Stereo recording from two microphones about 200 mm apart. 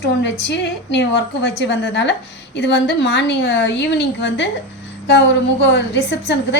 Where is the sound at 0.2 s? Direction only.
60° left (ahead or behind).